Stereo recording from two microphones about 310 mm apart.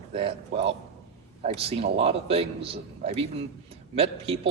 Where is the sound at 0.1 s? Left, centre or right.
Centre.